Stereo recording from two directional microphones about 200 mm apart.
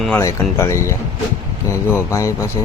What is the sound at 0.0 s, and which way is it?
Speech, 10° left (ahead or behind).